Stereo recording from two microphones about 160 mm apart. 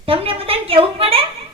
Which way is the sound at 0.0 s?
35° right (ahead or behind).